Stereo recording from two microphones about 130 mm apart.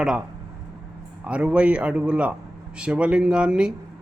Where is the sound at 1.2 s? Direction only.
10° right (ahead or behind).